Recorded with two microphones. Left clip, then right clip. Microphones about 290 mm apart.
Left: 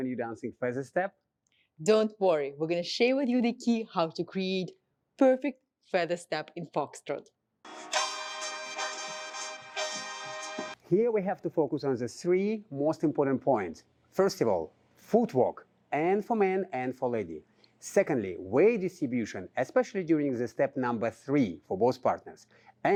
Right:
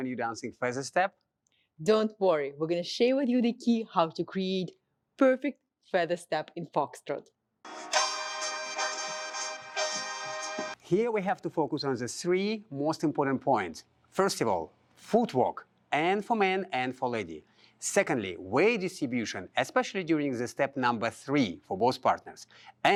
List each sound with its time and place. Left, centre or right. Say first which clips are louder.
0.0 s speech: right 1 dB; right
1.8 s speech: left 1 dB; centre
7.6 s music: right 2 dB; centre
10.8 s speech: left 1 dB; right
17.8 s speech: even; right
20.7 s speech: right 3 dB; right
21.0 s speech: even; right
21.5 s speech: even; right